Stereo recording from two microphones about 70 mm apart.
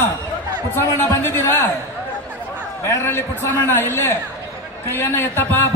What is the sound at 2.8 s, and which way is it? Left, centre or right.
A man's voice, left.